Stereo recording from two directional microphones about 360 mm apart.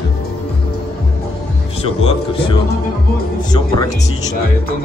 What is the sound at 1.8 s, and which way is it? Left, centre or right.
Speech, centre.